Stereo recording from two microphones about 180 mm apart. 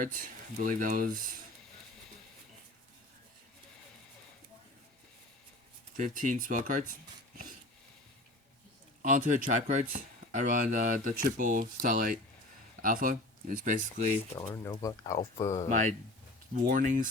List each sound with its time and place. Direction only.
0.0 s speech: 45° right (ahead or behind)
6.0 s speech: 45° right (ahead or behind)
9.0 s speech: 45° right (ahead or behind)
14.3 s speech: 15° left (ahead or behind)
15.7 s speech: 45° right (ahead or behind)